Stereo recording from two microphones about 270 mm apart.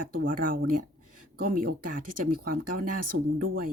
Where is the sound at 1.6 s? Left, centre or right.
Right.